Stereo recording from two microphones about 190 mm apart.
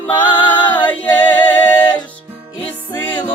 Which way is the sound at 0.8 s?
10° left (ahead or behind).